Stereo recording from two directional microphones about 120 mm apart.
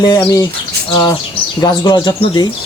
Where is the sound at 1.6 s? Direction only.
40° left (ahead or behind).